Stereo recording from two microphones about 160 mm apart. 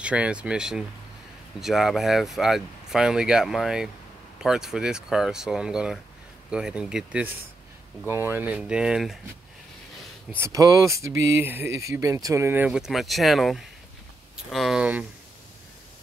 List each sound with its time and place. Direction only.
0.0 s speech: 5° right (ahead or behind)
10.4 s speech: 20° right (ahead or behind)